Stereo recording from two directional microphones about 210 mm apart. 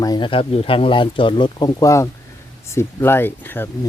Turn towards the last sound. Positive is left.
turn(degrees=10)  # may be behind; listen again after turning